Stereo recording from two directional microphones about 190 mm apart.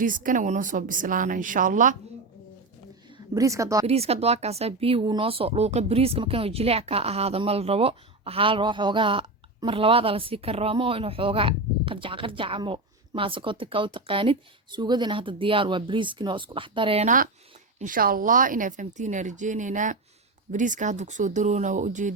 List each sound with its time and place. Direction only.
0.0 s a woman's voice: 45° right (ahead or behind)
3.3 s a woman's voice: 15° right (ahead or behind)
3.8 s a woman's voice: 30° right (ahead or behind)